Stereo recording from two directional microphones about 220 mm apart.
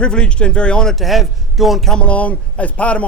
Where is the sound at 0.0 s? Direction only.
5° left (ahead or behind).